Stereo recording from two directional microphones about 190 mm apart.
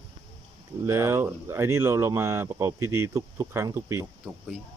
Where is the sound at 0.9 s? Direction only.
15° right (ahead or behind).